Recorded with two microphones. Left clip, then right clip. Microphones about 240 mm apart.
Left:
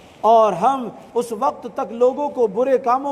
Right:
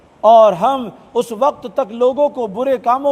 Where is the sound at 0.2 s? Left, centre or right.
Right.